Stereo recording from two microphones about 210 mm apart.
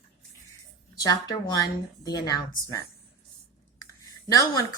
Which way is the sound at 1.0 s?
20° left (ahead or behind).